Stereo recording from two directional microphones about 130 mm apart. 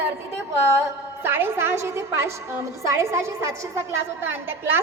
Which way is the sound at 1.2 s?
15° right (ahead or behind).